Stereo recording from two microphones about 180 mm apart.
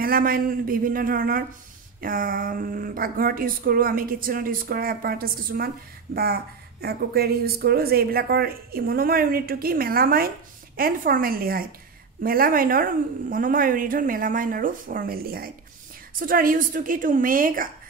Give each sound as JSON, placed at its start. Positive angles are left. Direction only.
{"t": 0.0, "sound": "a woman's voice", "side_deg": -55}